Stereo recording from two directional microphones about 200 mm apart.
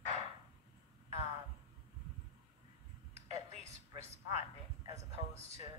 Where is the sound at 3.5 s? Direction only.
35° right (ahead or behind).